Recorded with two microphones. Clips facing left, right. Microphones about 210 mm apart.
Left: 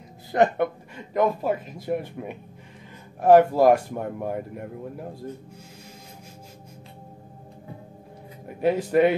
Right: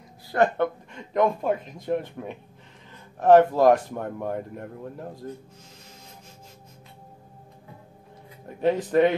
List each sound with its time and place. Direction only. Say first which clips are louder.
0.3 s speech: left 1 dB; 20° left (ahead or behind)
0.9 s speech: even; 5° left (ahead or behind)
8.5 s speech: even; 10° left (ahead or behind)